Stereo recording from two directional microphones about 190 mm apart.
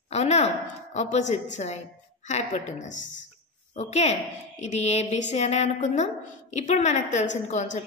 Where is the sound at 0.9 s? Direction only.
35° left (ahead or behind).